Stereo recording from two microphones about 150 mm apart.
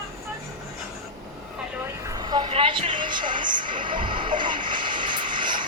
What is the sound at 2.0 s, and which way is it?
A woman's voice, 25° right (ahead or behind).